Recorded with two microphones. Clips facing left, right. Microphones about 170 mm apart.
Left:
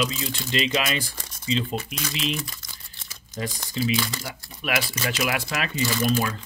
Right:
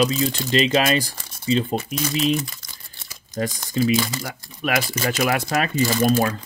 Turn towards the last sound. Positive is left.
turn(degrees=-40)  # may be behind; listen again after turning